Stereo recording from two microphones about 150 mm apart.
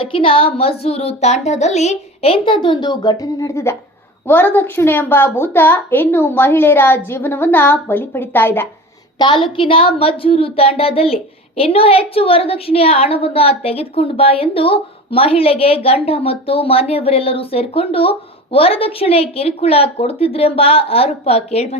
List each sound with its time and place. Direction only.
0.0 s a woman's voice: 35° left (ahead or behind); by 8.6 s 15° left (ahead or behind)
9.1 s a woman's voice: 30° left (ahead or behind)